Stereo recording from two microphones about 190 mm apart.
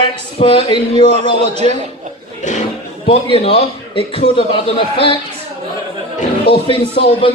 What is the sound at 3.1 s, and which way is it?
A man's voice, 30° left (ahead or behind).